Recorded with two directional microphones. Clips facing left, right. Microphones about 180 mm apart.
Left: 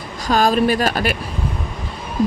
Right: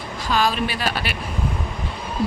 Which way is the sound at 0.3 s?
45° left (ahead or behind).